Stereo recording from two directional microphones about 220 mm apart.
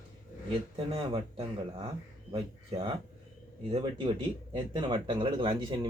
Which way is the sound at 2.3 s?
25° right (ahead or behind).